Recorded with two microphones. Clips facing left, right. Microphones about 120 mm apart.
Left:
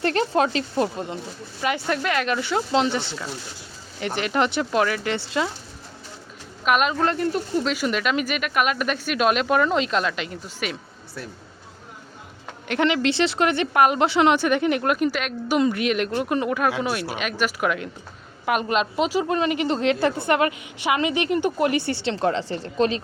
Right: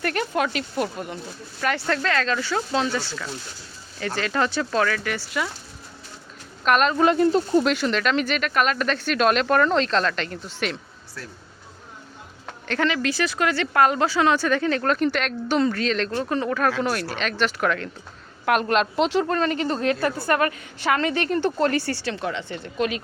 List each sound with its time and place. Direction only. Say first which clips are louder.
0.0 s a woman's voice: left 3 dB; 30° left (ahead or behind)
6.7 s speech: right 1 dB; 5° left (ahead or behind)
7.0 s speech: right 5 dB; 15° right (ahead or behind)
7.8 s speech: right 1 dB; 10° left (ahead or behind)
12.6 s a woman's voice: left 3 dB; 20° left (ahead or behind)